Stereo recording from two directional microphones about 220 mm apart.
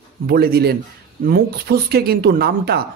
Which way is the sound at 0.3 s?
45° right (ahead or behind).